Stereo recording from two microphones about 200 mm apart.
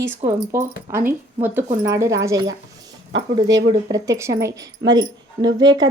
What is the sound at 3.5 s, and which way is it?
A woman's voice, 20° right (ahead or behind).